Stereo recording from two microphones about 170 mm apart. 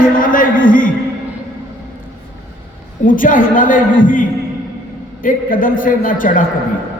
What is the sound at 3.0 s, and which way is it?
Speech, 50° left (ahead or behind).